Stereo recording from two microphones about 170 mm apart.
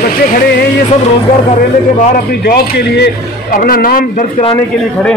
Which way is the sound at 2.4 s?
65° left (ahead or behind).